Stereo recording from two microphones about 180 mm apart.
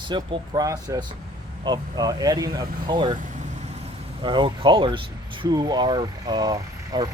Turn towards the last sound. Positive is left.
turn(degrees=-20)  # may be behind; listen again after turning